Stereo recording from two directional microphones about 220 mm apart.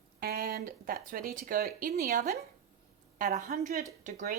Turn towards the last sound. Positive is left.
turn(degrees=-35)  # may be behind; listen again after turning